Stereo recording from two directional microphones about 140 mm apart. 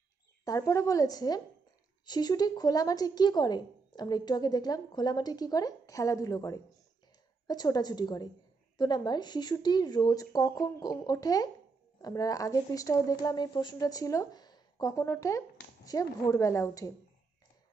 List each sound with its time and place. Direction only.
0.5 s a woman's voice: 20° left (ahead or behind)